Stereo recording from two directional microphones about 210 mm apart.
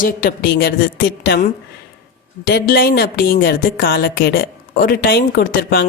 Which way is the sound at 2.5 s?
45° left (ahead or behind).